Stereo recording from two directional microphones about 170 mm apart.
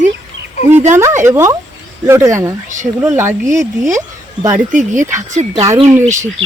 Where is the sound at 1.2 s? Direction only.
15° right (ahead or behind).